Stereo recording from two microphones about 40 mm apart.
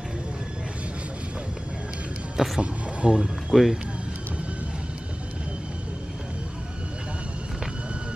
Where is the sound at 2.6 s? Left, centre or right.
Right.